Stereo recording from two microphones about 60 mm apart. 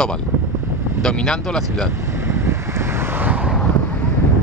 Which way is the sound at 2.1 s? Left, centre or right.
Right.